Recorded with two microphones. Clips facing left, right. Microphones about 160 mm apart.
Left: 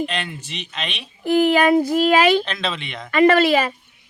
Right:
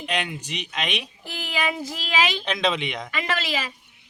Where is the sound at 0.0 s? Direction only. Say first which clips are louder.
Left 3 dB; 10° right (ahead or behind).